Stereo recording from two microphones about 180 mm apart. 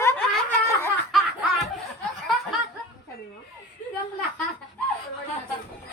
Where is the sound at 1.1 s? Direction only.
Centre (ahead or behind).